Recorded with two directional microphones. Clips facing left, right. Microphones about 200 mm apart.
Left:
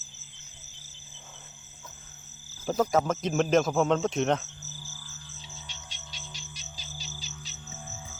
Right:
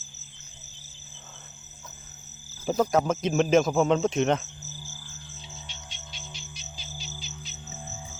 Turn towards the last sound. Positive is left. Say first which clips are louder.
# right 2 dB
turn(degrees=40)  # may be behind; listen again after turning